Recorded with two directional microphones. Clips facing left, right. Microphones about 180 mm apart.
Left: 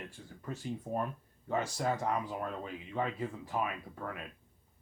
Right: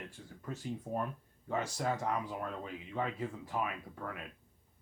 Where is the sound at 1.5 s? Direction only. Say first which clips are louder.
Left 2 dB; 30° left (ahead or behind).